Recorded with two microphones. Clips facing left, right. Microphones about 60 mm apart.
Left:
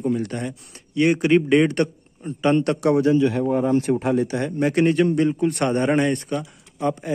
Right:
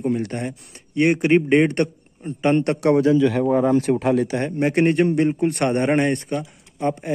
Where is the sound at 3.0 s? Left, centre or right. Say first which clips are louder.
Right 1 dB; right.